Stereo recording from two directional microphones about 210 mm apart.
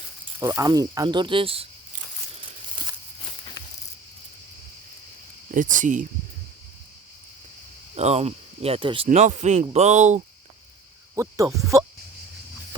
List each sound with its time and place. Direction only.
0.3 s speech: 15° right (ahead or behind)
5.5 s speech: 40° right (ahead or behind)
7.9 s speech: 30° right (ahead or behind)
11.1 s hoot: 15° right (ahead or behind)